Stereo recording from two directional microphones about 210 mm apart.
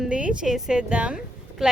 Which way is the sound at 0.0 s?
5° right (ahead or behind).